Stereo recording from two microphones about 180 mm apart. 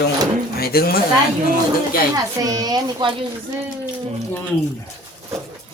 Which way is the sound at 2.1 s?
20° right (ahead or behind).